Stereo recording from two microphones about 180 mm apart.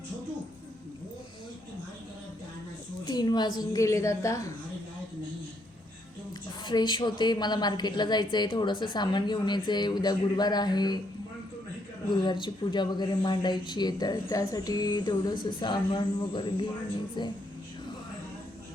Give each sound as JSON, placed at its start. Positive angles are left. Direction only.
{"t": 3.0, "sound": "speech", "side_deg": 20}
{"t": 6.7, "sound": "speech", "side_deg": 25}
{"t": 12.1, "sound": "speech", "side_deg": 25}